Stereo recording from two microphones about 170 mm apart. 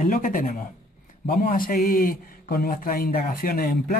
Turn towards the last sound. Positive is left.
turn(degrees=60)  # may be behind; listen again after turning